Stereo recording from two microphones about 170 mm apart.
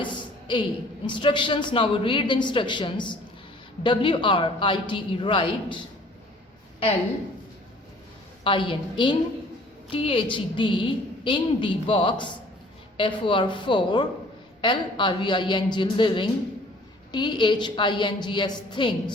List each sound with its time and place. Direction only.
0.0 s a sound: 30° left (ahead or behind)
1.0 s a woman's voice: 30° left (ahead or behind)
8.4 s a woman's voice: 30° left (ahead or behind)